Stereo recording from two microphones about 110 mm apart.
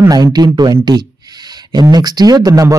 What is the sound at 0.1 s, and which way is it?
A man's voice, 35° right (ahead or behind).